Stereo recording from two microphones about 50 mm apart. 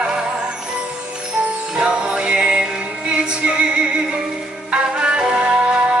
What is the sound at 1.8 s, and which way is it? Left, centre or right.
Music, centre.